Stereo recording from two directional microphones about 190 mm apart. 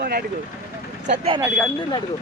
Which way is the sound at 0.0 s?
55° right (ahead or behind).